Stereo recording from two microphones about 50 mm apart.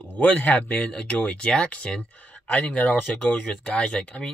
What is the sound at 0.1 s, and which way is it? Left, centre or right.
Speech, left.